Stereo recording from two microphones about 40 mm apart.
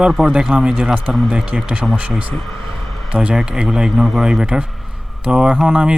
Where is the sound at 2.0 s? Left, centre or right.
Right; by 4.4 s centre.